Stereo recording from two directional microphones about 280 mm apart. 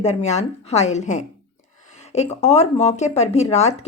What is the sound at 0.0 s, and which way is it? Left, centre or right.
A woman's voice, left.